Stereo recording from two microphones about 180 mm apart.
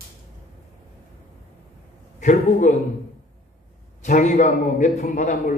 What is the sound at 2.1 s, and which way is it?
Speech, 45° left (ahead or behind).